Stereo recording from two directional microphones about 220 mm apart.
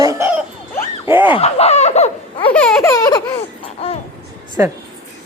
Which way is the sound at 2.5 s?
5° left (ahead or behind).